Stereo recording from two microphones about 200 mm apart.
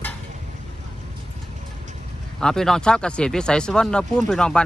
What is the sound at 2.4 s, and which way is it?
Speech, 5° left (ahead or behind).